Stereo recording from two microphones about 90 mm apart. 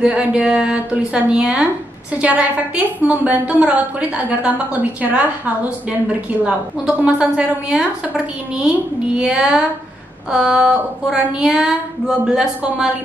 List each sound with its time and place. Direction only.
0.0 s a woman's voice: 10° right (ahead or behind)
7.1 s a woman's voice: 5° right (ahead or behind)